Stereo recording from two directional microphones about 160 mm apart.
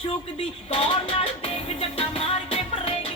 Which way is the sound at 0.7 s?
40° left (ahead or behind).